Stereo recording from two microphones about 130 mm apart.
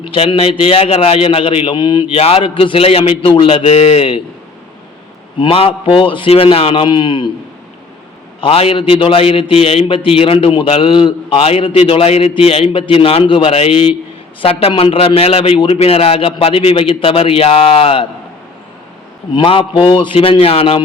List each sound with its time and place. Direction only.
0.0 s a man's voice: 45° left (ahead or behind)
5.4 s a man's voice: 45° left (ahead or behind)
8.4 s a man's voice: 45° left (ahead or behind)
19.3 s a man's voice: 40° left (ahead or behind)